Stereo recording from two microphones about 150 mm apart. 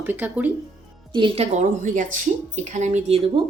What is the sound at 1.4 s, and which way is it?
Speech, 55° right (ahead or behind).